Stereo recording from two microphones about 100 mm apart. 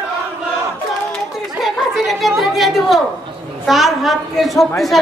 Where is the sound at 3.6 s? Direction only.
Centre (ahead or behind).